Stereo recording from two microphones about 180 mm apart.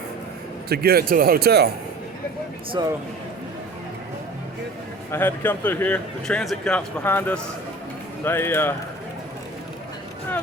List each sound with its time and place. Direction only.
0.7 s speech: 60° right (ahead or behind)
2.8 s a man's voice: 20° right (ahead or behind)
5.1 s a man's voice: 10° left (ahead or behind)